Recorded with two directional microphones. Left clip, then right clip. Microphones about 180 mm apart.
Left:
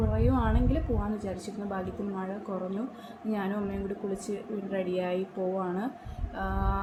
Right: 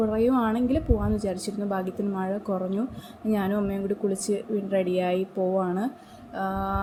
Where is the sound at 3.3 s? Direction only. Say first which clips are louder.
Right 6 dB; 35° right (ahead or behind).